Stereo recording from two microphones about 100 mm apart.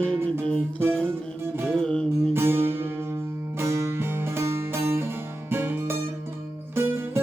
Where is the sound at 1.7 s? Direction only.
10° left (ahead or behind).